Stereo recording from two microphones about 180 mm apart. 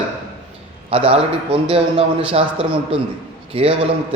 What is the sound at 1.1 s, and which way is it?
A man's voice, 30° right (ahead or behind).